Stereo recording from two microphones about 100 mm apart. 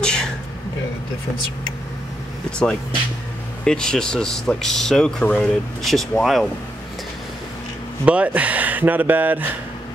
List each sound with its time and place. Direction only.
0.0 s a sound: 10° left (ahead or behind)
2.6 s speech: 10° left (ahead or behind)
8.0 s speech: 15° right (ahead or behind)